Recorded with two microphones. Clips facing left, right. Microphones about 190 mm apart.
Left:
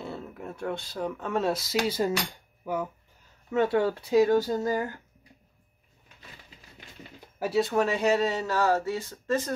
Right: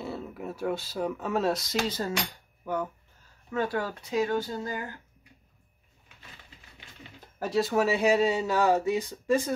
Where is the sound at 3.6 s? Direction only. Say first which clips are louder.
Left 6 dB; 25° left (ahead or behind); by 4.9 s 45° left (ahead or behind).